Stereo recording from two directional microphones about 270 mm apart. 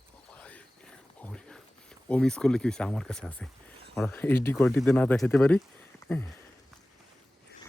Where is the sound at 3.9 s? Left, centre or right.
Centre.